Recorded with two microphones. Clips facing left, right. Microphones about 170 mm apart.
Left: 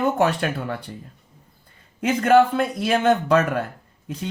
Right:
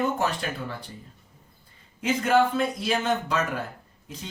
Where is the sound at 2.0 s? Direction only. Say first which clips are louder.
Left 6 dB; 60° left (ahead or behind).